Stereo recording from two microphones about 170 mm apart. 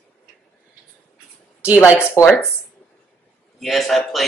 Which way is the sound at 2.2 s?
20° left (ahead or behind).